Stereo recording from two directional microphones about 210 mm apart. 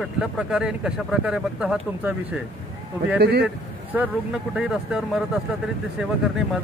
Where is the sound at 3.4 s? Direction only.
10° right (ahead or behind).